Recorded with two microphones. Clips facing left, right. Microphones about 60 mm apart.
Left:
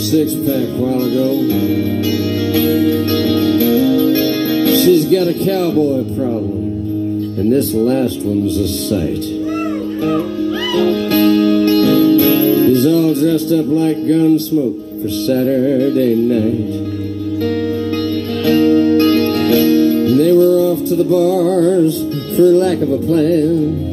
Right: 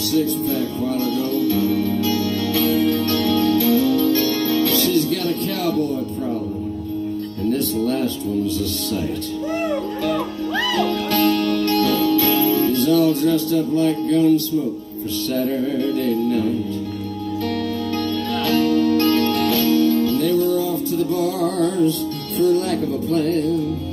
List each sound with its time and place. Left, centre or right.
0.1 s music: left
7.4 s music: left
10.8 s music: left
18.4 s music: left